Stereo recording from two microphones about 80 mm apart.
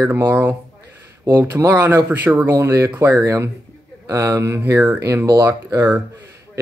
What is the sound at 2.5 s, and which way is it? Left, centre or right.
Speech, right.